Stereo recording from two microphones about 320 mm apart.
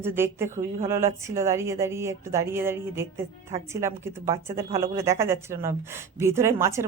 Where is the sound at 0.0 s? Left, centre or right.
Centre.